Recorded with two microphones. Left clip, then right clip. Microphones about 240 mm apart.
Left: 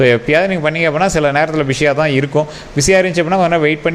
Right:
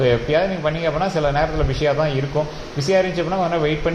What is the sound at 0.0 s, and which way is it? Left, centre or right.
Speech, left.